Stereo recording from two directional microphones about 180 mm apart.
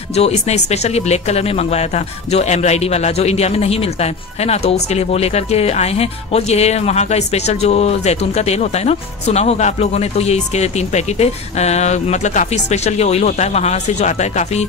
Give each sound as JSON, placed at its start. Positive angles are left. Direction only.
{"t": 0.1, "sound": "speech", "side_deg": 35}